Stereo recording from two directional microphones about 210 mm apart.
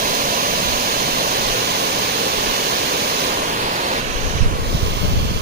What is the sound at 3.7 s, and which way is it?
Waves, 40° right (ahead or behind).